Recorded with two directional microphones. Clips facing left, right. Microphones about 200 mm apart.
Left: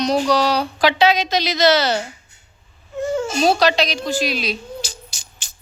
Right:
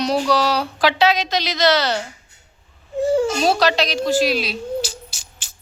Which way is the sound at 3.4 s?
Centre (ahead or behind).